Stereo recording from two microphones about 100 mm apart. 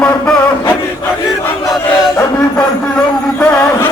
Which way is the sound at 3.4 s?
15° left (ahead or behind).